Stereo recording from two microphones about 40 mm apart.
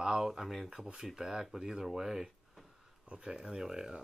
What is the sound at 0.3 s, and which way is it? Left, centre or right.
Speech, centre.